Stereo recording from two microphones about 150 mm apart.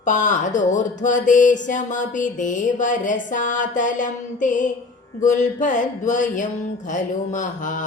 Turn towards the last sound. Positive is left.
turn(degrees=60)  # may be behind; listen again after turning